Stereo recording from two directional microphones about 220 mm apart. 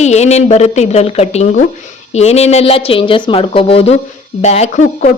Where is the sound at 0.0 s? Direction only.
30° left (ahead or behind).